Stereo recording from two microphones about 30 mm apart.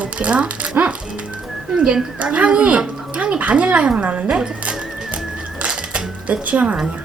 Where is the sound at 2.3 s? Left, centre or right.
Right.